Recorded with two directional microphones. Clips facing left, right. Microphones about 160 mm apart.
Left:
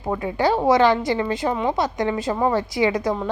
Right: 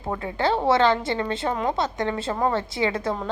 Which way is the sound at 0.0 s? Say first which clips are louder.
Left 4 dB; 15° left (ahead or behind).